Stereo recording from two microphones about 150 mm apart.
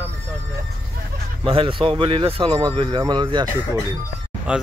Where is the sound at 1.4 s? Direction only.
35° right (ahead or behind).